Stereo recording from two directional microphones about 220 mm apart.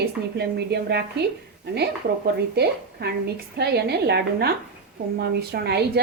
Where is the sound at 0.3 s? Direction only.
50° right (ahead or behind).